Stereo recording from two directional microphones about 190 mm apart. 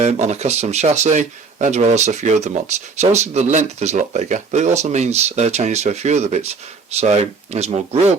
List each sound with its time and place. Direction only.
0.0 s speech: 35° right (ahead or behind)